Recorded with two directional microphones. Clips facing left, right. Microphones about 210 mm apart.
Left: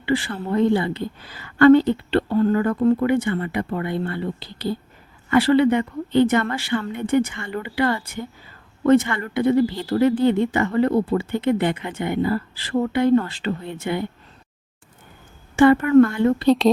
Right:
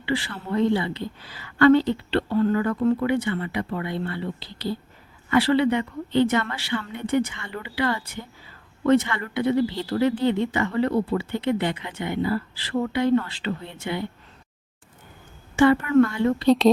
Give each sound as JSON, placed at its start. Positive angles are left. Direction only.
{"t": 0.0, "sound": "speech", "side_deg": 50}
{"t": 15.5, "sound": "speech", "side_deg": 55}
{"t": 16.5, "sound": "speech", "side_deg": 0}